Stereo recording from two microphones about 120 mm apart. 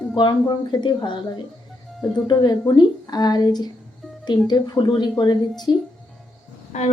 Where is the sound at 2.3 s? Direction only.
35° left (ahead or behind).